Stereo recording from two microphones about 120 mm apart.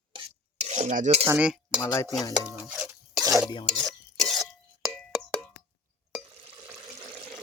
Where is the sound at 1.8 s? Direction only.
25° left (ahead or behind).